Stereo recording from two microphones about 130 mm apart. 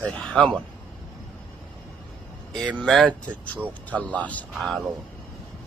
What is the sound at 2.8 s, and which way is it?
A man's voice, 5° left (ahead or behind).